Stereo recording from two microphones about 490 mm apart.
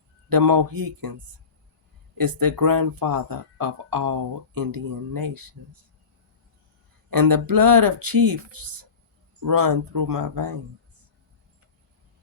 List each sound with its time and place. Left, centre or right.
0.3 s speech: right
2.1 s speech: right
7.1 s speech: right